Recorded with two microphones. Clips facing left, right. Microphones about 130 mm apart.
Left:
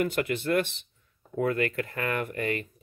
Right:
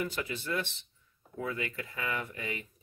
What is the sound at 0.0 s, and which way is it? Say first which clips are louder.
Speech: left 8 dB; 65° left (ahead or behind).